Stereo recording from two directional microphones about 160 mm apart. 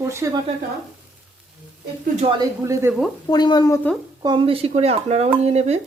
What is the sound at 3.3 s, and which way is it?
Speech, 25° left (ahead or behind).